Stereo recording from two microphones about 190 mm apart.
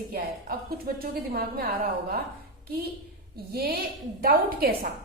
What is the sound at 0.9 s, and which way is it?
A woman's voice, 50° right (ahead or behind).